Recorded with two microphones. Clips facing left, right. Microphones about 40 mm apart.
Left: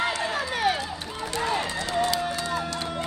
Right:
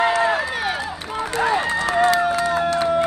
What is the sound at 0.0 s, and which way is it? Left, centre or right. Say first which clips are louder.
Run: right 8 dB; right.